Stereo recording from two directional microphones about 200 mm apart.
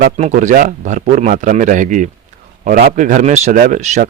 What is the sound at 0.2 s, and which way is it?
A man's voice, 40° right (ahead or behind).